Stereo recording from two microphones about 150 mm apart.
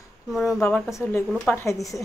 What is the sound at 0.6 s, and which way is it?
Speech, 15° left (ahead or behind).